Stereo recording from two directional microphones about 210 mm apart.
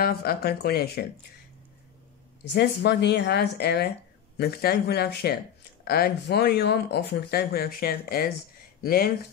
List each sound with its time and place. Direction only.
0.0 s speech: 45° left (ahead or behind)
2.5 s speech: 55° left (ahead or behind)